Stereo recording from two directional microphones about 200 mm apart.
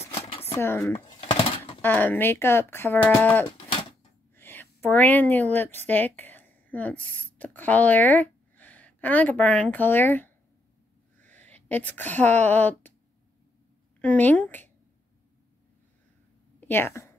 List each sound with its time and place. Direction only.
0.1 s a sound: 30° left (ahead or behind)
0.6 s speech: 10° left (ahead or behind)
0.9 s a sound: 25° left (ahead or behind)
1.8 s speech: 10° left (ahead or behind)
3.4 s livestock: 25° left (ahead or behind)
4.4 s a woman's voice: 10° left (ahead or behind)
14.0 s speech: 10° left (ahead or behind)
16.5 s a woman's voice: 10° left (ahead or behind)